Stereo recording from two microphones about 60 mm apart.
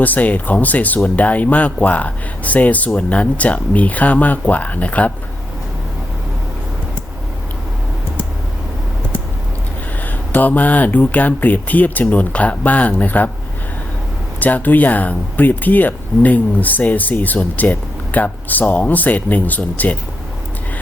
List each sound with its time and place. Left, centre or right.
0.0 s speech: left
10.3 s speech: left
14.3 s speech: left